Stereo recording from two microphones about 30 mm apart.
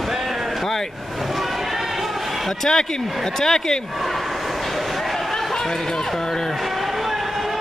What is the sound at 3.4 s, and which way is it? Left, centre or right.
Speech, centre.